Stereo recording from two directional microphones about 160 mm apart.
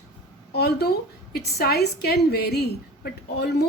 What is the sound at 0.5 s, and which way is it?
A woman's voice, 80° left.